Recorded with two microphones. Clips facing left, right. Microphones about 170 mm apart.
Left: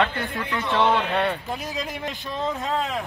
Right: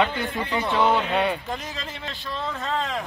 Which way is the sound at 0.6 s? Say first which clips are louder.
Even; 5° right (ahead or behind).